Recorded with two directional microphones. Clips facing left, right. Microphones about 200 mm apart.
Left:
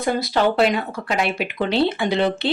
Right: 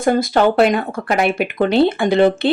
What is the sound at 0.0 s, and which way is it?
Speech, 50° right (ahead or behind).